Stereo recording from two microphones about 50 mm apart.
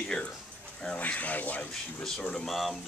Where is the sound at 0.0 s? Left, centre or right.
Centre.